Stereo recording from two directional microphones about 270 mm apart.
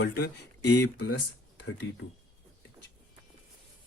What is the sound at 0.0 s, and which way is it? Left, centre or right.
Speech, left.